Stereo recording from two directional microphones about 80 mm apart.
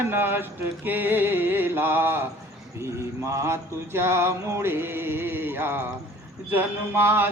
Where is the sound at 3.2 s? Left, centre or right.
Right.